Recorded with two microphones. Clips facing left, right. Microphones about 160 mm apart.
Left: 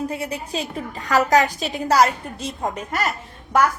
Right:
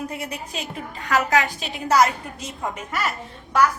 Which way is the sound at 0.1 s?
30° left (ahead or behind).